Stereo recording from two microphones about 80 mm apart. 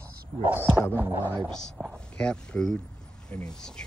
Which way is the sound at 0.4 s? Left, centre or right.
Right.